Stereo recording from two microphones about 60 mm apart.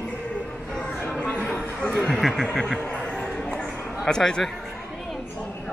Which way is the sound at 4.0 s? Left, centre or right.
Centre.